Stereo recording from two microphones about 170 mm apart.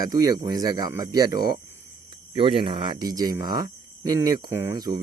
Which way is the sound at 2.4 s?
30° right (ahead or behind).